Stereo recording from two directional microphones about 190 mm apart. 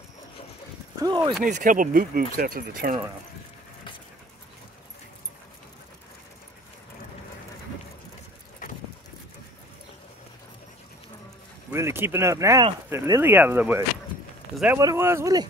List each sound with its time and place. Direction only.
0.9 s speech: 20° right (ahead or behind)
1.4 s speech: 45° right (ahead or behind)
11.7 s speech: 15° right (ahead or behind)